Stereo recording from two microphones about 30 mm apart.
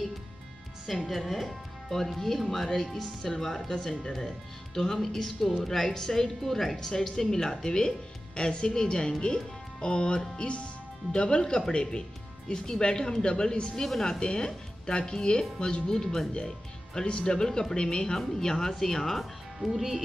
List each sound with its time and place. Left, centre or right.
1.0 s speech: centre
3.7 s speech: left
4.9 s speech: centre
8.4 s a woman's voice: left
17.0 s a woman's voice: left
17.4 s speech: centre
19.1 s speech: centre